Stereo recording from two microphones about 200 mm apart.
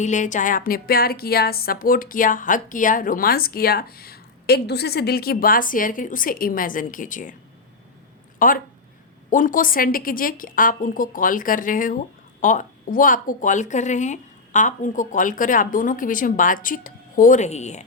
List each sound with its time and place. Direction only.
0.0 s a woman's voice: 40° left (ahead or behind)
8.4 s a woman's voice: 45° left (ahead or behind)